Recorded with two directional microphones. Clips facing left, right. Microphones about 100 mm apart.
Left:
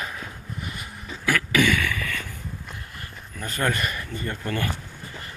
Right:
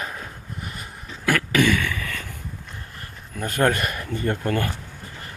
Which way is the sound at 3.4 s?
55° right (ahead or behind).